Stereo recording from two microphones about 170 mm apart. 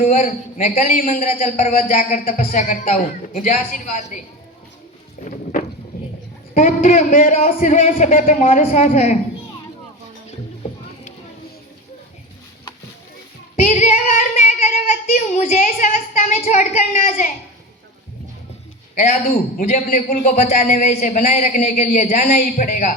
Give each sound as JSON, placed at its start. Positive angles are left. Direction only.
{"t": 0.1, "sound": "a man's voice", "side_deg": 45}
{"t": 5.2, "sound": "vehicle", "side_deg": 50}
{"t": 6.5, "sound": "a man's voice", "side_deg": 50}
{"t": 13.7, "sound": "a man's voice", "side_deg": 45}
{"t": 18.9, "sound": "a man's voice", "side_deg": 50}